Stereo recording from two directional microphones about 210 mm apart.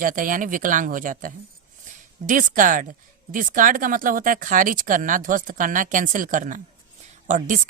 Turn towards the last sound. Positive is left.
turn(degrees=-40)  # may be behind; listen again after turning